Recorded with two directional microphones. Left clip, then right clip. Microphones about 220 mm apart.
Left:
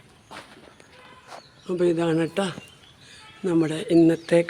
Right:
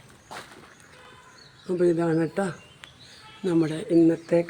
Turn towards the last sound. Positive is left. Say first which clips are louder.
# left 2 dB
turn(degrees=20)  # may be behind; listen again after turning